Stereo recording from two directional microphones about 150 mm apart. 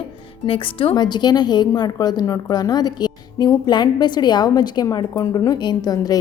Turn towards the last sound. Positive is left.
turn(degrees=25)  # may be behind; listen again after turning